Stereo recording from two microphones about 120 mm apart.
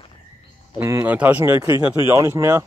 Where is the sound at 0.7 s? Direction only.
20° right (ahead or behind).